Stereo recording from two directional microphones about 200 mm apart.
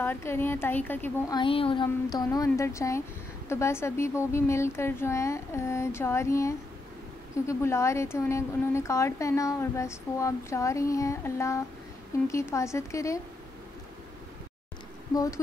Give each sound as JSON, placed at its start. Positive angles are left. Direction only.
{"t": 0.0, "sound": "a woman's voice", "side_deg": 10}
{"t": 1.4, "sound": "a woman's voice", "side_deg": 25}
{"t": 15.1, "sound": "a woman's voice", "side_deg": 15}